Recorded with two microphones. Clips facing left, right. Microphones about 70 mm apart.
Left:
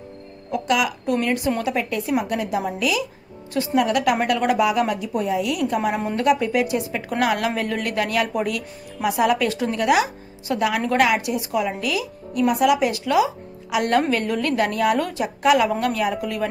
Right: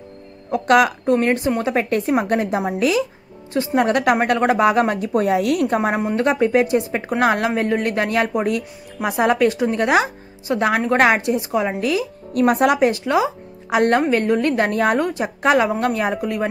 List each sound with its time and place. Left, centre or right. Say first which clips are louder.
0.5 s speech: right 6 dB; right
1.0 s speech: right 4 dB; right
5.9 s a woman's voice: right 4 dB; right
6.2 s speech: right 2 dB; right
12.4 s a woman's voice: right 3 dB; right